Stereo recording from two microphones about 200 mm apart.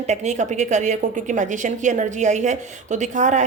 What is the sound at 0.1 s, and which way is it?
A woman's voice, 35° right (ahead or behind).